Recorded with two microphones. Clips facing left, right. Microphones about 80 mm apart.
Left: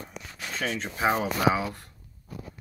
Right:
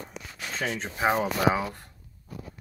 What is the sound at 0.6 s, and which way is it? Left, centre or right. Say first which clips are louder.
Speech: even; centre.